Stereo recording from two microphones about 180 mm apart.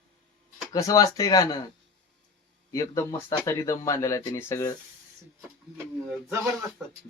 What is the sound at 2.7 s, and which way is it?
Speech, 20° left (ahead or behind).